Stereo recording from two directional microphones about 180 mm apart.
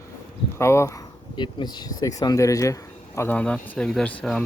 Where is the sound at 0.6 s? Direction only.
15° left (ahead or behind).